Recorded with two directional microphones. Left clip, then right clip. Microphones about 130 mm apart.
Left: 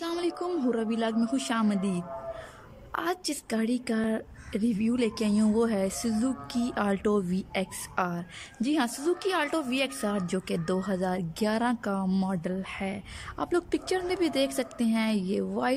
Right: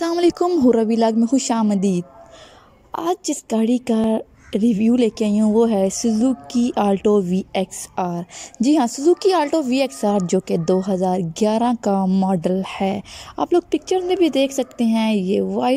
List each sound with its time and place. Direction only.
0.2 s a sound: 65° right (ahead or behind)
0.5 s speech: 50° right (ahead or behind)
12.0 s speech: 20° right (ahead or behind)
12.3 s speech: 40° right (ahead or behind)
13.4 s speech: 25° right (ahead or behind)